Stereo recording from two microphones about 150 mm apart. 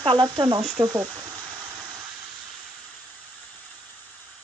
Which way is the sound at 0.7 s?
25° right (ahead or behind).